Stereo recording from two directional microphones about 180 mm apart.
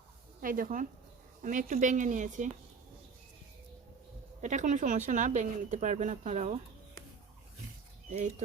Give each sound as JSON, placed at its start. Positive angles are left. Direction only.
{"t": 0.4, "sound": "speech", "side_deg": -50}
{"t": 4.4, "sound": "speech", "side_deg": -40}